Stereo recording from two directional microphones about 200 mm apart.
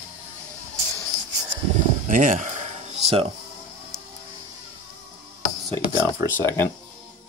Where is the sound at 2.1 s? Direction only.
40° right (ahead or behind).